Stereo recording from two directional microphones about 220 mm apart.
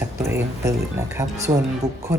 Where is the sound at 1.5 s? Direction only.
20° right (ahead or behind).